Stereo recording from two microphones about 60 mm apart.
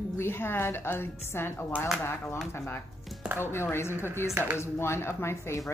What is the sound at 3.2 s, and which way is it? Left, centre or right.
Speech, right.